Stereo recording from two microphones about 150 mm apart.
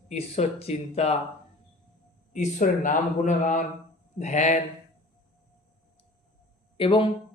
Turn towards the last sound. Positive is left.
turn(degrees=35)  # may be behind; listen again after turning